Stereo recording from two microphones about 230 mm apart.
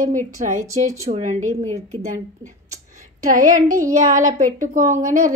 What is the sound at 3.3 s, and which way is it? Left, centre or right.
Speech, right.